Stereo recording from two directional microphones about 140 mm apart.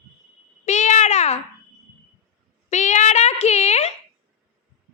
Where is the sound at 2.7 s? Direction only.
60° left (ahead or behind).